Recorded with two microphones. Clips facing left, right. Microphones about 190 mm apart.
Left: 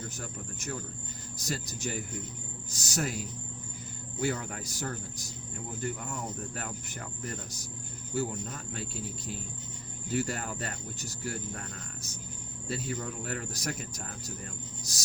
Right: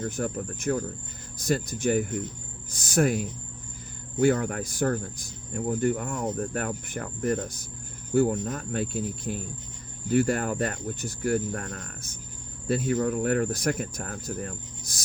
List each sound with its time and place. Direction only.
0.0 s speech: 55° right (ahead or behind)
4.2 s speech: 55° right (ahead or behind)